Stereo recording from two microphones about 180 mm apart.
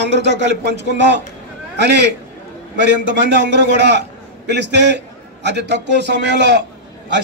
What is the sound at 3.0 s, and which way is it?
A man's voice, 75° right (ahead or behind).